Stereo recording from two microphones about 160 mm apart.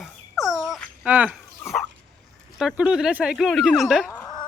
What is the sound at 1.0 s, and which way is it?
Speech, 10° right (ahead or behind).